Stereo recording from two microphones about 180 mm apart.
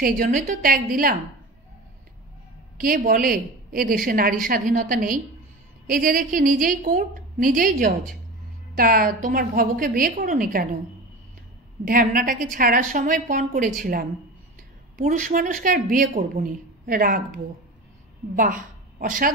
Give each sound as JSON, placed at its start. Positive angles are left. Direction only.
{"t": 0.0, "sound": "a woman's voice", "side_deg": -50}
{"t": 2.8, "sound": "a woman's voice", "side_deg": -50}
{"t": 11.8, "sound": "a woman's voice", "side_deg": -50}
{"t": 18.3, "sound": "a woman's voice", "side_deg": -50}